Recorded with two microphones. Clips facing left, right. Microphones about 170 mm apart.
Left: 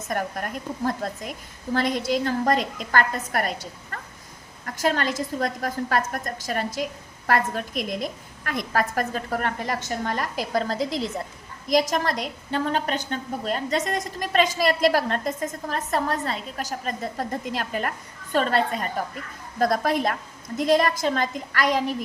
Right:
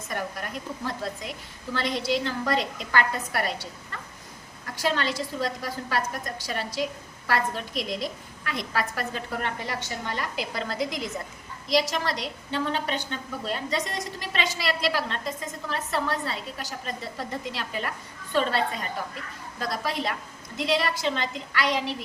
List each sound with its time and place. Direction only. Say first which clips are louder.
0.1 s a woman's voice: left 4 dB; 50° left (ahead or behind)
11.7 s a woman's voice: left 3 dB; 50° left (ahead or behind)